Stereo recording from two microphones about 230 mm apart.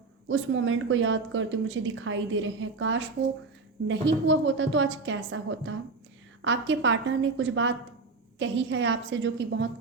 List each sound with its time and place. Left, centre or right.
0.3 s a woman's voice: right